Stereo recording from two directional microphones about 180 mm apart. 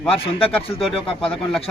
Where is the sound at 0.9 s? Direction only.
30° left (ahead or behind).